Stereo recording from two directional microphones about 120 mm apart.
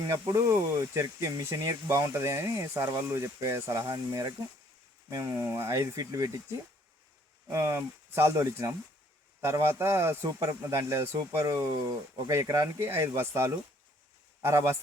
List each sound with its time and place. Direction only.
0.0 s speech: 25° right (ahead or behind)
7.5 s speech: 25° right (ahead or behind)